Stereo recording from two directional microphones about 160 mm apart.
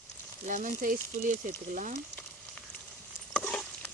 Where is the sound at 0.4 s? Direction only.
55° right (ahead or behind).